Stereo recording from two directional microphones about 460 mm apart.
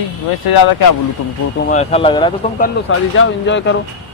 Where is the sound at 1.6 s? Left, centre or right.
Centre.